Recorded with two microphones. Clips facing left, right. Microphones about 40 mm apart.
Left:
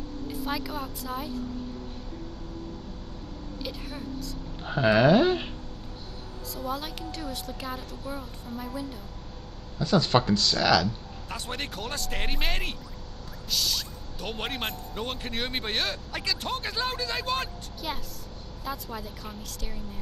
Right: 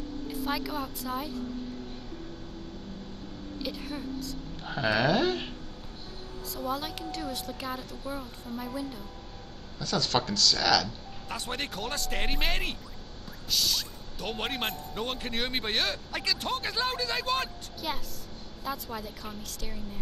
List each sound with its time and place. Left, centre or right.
0.5 s speech: centre
3.7 s speech: centre
4.6 s speech: centre
6.5 s speech: centre
9.8 s speech: centre
11.2 s speech: centre